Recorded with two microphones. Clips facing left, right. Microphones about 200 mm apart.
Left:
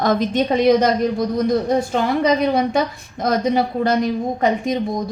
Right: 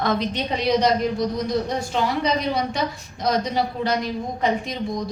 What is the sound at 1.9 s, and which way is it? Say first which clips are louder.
A woman's voice: left 2 dB; 50° left (ahead or behind).